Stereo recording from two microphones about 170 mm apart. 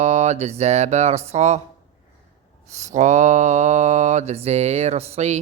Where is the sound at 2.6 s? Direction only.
45° right (ahead or behind).